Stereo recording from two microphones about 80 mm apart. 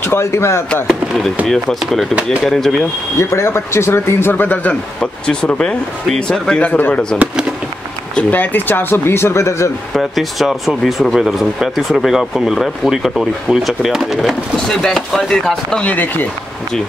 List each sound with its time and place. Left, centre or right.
0.1 s speech: left
0.8 s speech: centre
3.2 s speech: left
5.0 s a man's voice: centre
8.2 s speech: left
9.9 s speech: centre
15.9 s speech: left